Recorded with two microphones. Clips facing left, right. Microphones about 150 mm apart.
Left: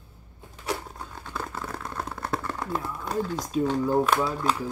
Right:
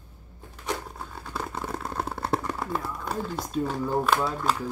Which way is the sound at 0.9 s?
5° right (ahead or behind).